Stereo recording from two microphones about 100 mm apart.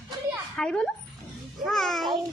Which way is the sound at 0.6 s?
5° left (ahead or behind).